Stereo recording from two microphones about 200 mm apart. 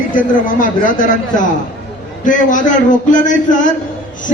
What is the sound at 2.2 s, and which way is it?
A man's voice, 40° left (ahead or behind).